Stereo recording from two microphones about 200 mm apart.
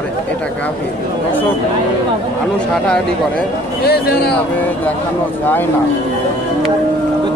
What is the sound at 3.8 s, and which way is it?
Speech, 50° left (ahead or behind).